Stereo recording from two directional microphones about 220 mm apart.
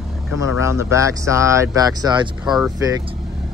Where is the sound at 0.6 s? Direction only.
10° right (ahead or behind).